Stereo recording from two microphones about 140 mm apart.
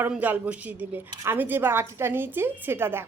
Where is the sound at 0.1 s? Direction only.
10° right (ahead or behind).